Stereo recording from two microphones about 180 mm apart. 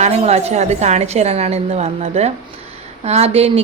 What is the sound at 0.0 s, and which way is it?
Speech, 35° right (ahead or behind).